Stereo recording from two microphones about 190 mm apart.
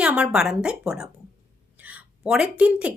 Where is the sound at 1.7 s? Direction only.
10° right (ahead or behind).